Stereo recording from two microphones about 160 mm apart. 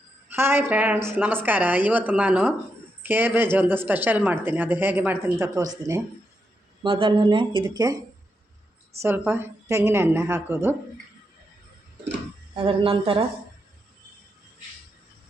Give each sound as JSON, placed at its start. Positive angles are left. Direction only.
{"t": 0.3, "sound": "a woman's voice", "side_deg": -15}
{"t": 6.8, "sound": "speech", "side_deg": -30}
{"t": 9.0, "sound": "a woman's voice", "side_deg": -15}
{"t": 12.5, "sound": "speech", "side_deg": -35}